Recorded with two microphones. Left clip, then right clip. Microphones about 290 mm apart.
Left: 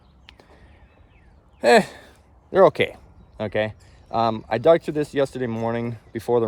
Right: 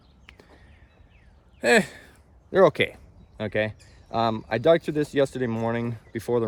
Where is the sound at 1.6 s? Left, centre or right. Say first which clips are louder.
Left 4 dB; centre.